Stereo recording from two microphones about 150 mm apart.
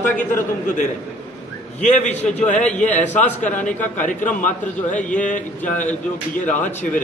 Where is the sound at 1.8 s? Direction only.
55° left (ahead or behind).